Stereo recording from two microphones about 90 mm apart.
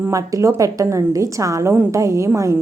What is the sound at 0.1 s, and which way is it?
A woman's voice, 40° right (ahead or behind).